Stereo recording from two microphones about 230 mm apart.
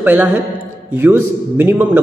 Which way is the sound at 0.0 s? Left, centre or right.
Centre.